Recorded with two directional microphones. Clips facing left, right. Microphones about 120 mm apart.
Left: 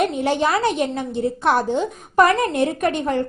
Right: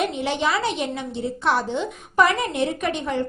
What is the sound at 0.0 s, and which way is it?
A woman's voice, 45° left (ahead or behind).